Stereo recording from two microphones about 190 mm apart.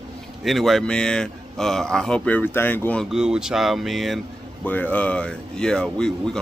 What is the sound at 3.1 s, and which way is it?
Speech, 5° right (ahead or behind).